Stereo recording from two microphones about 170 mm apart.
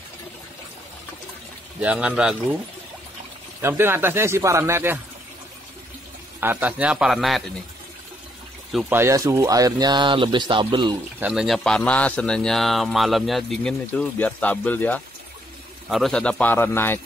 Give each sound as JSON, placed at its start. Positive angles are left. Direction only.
{"t": 1.8, "sound": "speech", "side_deg": -10}
{"t": 3.6, "sound": "speech", "side_deg": -15}
{"t": 6.4, "sound": "speech", "side_deg": -10}
{"t": 8.7, "sound": "speech", "side_deg": -10}
{"t": 11.1, "sound": "a man's voice", "side_deg": -5}